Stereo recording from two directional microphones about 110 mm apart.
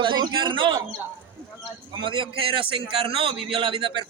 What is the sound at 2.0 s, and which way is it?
A man's voice, 50° right (ahead or behind).